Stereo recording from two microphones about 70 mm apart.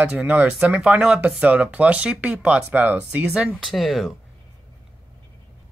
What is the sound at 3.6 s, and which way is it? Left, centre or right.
Speech, centre.